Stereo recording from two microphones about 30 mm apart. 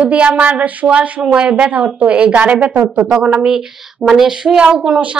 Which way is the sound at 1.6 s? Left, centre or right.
Right.